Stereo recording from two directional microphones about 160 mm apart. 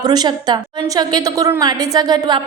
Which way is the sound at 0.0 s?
25° right (ahead or behind).